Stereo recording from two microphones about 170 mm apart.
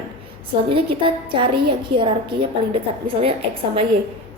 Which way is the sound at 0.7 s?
30° right (ahead or behind).